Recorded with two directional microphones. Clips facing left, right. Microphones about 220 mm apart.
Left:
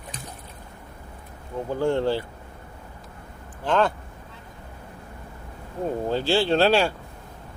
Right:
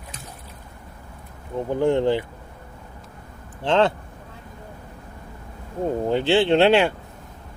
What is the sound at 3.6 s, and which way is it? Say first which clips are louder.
Speech: right 3 dB; 25° right (ahead or behind).